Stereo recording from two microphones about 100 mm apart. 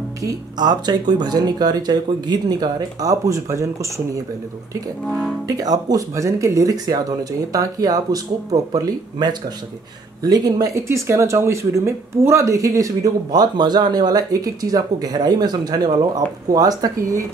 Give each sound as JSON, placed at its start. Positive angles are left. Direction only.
{"t": 0.2, "sound": "speech", "side_deg": -40}
{"t": 5.0, "sound": "speech", "side_deg": 0}
{"t": 5.5, "sound": "speech", "side_deg": -40}